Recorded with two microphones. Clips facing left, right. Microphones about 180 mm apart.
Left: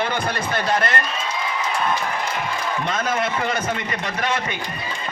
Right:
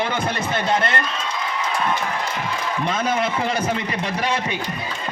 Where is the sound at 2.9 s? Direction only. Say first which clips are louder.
Right 2 dB; 30° right (ahead or behind).